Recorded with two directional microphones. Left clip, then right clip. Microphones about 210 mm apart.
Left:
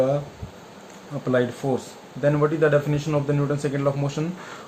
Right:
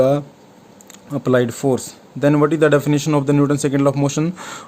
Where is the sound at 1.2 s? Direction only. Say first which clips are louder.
Right 6 dB; 55° right (ahead or behind).